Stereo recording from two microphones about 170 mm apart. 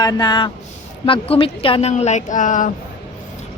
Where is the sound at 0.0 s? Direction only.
25° left (ahead or behind); by 2.7 s 50° left (ahead or behind).